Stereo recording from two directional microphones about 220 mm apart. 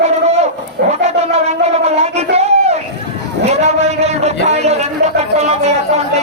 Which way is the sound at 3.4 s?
30° right (ahead or behind).